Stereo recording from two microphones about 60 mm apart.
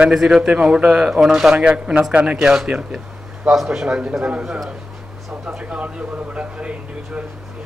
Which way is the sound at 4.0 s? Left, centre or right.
Centre.